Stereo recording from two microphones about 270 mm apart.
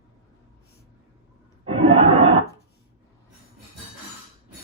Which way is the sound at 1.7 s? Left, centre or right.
Right.